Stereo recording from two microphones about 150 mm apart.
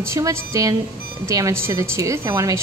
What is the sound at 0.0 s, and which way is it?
A woman's voice, 20° right (ahead or behind).